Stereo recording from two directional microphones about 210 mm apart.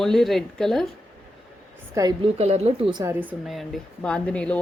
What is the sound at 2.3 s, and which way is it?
Speech, 30° right (ahead or behind).